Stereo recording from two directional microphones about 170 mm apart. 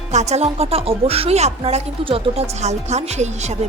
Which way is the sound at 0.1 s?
40° right (ahead or behind).